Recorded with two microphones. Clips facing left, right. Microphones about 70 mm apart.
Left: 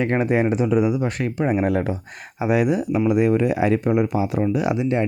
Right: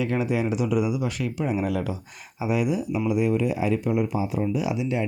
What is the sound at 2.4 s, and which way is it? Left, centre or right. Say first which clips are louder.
Speech: left 5 dB; left.